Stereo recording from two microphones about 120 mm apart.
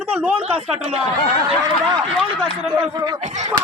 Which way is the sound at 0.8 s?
55° right (ahead or behind).